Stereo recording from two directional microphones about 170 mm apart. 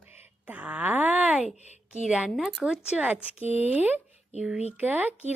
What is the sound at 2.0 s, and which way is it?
Speech, 5° right (ahead or behind).